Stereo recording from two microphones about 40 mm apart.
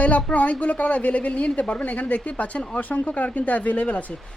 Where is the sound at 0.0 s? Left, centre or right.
Left.